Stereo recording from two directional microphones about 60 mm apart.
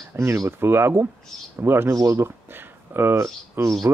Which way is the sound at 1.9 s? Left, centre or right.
Right.